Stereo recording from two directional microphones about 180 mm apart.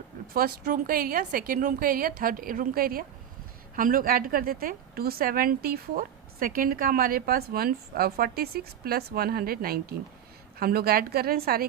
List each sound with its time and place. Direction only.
0.3 s a woman's voice: 50° right (ahead or behind)